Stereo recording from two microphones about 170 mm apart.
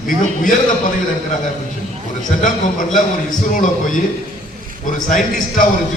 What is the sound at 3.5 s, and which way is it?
Speech, 50° left (ahead or behind).